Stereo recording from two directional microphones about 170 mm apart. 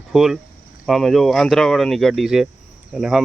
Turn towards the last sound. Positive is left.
turn(degrees=-5)  # may be behind; listen again after turning